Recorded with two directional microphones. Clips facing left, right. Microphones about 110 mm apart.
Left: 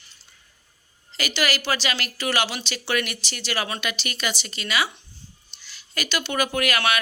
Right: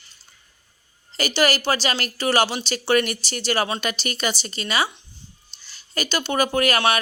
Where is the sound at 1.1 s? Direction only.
35° right (ahead or behind).